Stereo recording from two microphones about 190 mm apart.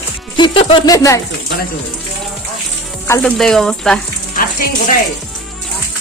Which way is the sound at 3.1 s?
5° left (ahead or behind).